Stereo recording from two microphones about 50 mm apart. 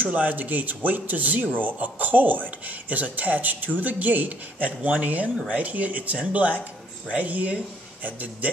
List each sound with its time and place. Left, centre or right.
0.0 s speech: right